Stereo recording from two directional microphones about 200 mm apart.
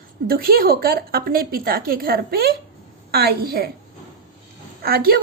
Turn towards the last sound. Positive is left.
turn(degrees=-50)  # may be behind; listen again after turning